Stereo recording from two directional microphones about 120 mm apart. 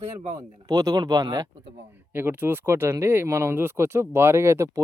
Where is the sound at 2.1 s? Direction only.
20° right (ahead or behind).